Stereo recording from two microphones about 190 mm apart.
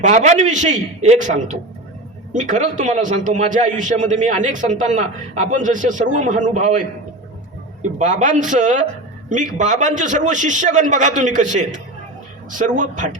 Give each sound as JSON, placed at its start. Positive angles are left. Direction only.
{"t": 0.0, "sound": "a man's voice", "side_deg": -40}
{"t": 7.9, "sound": "a man's voice", "side_deg": -40}